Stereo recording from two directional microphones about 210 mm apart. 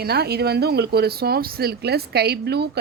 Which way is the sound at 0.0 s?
50° right (ahead or behind).